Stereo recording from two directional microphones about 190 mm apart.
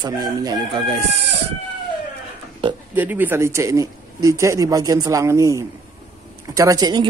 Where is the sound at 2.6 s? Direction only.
25° right (ahead or behind).